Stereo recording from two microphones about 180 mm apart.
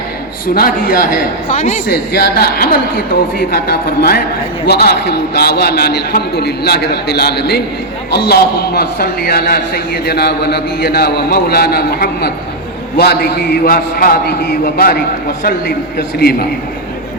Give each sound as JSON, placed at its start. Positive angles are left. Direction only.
{"t": 0.4, "sound": "a man's voice", "side_deg": 55}
{"t": 1.9, "sound": "a man's voice", "side_deg": 60}